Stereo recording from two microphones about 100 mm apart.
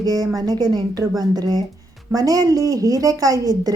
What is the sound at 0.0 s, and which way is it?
A woman's voice, 40° right (ahead or behind).